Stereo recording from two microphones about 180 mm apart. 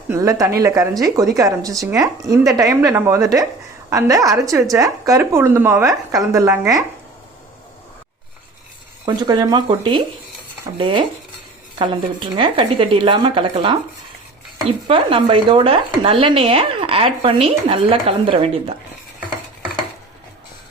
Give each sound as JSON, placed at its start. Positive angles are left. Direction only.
{"t": 0.1, "sound": "a woman's voice", "side_deg": -20}
{"t": 9.0, "sound": "speech", "side_deg": -25}
{"t": 14.8, "sound": "speech", "side_deg": -30}